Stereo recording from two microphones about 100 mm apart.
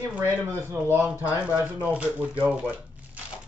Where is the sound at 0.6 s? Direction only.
25° right (ahead or behind).